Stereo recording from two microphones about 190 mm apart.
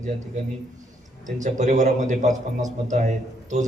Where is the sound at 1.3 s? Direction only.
40° right (ahead or behind).